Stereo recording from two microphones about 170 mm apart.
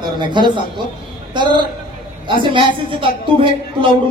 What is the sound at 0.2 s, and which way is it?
Speech, 25° right (ahead or behind).